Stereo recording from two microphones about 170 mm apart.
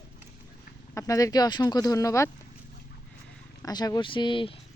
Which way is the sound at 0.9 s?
20° left (ahead or behind).